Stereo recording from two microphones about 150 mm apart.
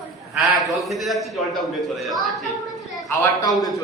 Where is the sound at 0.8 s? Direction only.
Centre (ahead or behind).